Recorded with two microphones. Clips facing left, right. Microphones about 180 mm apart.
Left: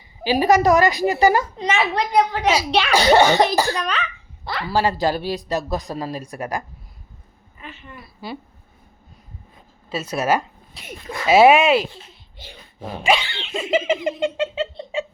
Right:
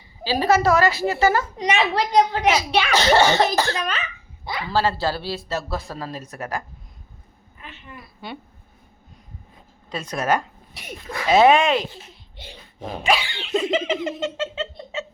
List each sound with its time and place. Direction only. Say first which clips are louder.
0.3 s speech: left 3 dB; 15° left (ahead or behind)
1.5 s a child's voice: even; 15° right (ahead or behind)
2.5 s speech: left 1 dB; 10° left (ahead or behind)
3.8 s speech: left 2 dB; centre (ahead or behind)
4.7 s speech: left 2 dB; 15° left (ahead or behind)
7.6 s a woman's voice: left 2 dB; centre (ahead or behind)
9.9 s speech: left 2 dB; 5° left (ahead or behind)
13.1 s a child's voice: left 1 dB; 10° right (ahead or behind)
13.5 s speech: left 1 dB; 10° left (ahead or behind)